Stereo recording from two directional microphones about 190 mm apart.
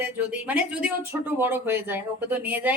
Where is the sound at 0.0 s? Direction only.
10° right (ahead or behind).